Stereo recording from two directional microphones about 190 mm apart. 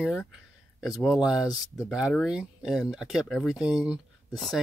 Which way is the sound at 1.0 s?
Centre (ahead or behind).